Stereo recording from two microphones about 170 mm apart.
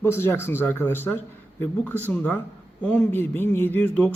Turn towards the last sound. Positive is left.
turn(degrees=10)  # may be behind; listen again after turning